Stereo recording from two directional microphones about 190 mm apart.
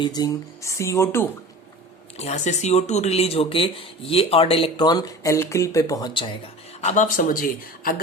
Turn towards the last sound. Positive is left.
turn(degrees=45)  # may be behind; listen again after turning